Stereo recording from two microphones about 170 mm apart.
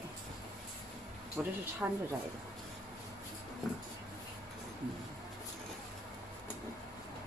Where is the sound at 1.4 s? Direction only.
10° right (ahead or behind).